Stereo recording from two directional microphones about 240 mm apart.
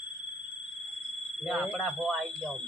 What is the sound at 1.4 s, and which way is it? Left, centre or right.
Speech, centre.